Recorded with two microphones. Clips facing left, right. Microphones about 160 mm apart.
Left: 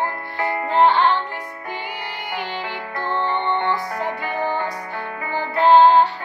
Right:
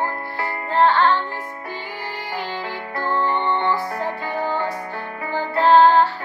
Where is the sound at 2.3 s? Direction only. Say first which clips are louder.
Even; 20° left (ahead or behind).